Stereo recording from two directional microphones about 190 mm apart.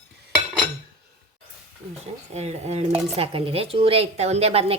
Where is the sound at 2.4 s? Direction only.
35° right (ahead or behind).